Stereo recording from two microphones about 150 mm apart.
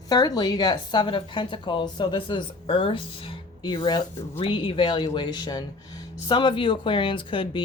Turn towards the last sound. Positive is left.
turn(degrees=35)  # may be behind; listen again after turning